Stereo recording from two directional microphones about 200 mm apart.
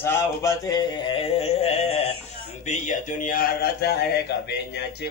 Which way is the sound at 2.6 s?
35° left (ahead or behind).